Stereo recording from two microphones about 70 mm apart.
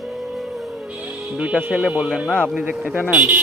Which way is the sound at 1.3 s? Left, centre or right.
Centre.